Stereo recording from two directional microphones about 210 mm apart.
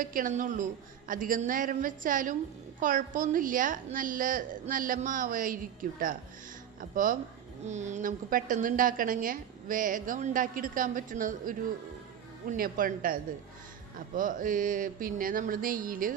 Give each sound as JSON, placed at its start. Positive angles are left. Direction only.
{"t": 0.0, "sound": "a woman's voice", "side_deg": -40}
{"t": 14.2, "sound": "a woman's voice", "side_deg": -40}